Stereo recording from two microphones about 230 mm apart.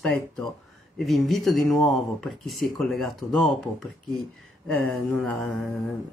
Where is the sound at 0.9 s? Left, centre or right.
Centre.